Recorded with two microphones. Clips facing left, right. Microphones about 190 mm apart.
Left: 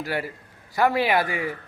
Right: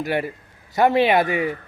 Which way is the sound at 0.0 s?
20° right (ahead or behind).